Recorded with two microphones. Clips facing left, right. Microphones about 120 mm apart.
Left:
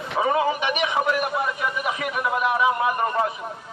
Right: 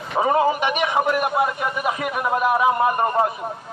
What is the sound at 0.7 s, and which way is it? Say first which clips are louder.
Speech: right 2 dB; 50° right (ahead or behind).